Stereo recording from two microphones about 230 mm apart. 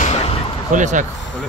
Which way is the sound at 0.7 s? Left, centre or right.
Right.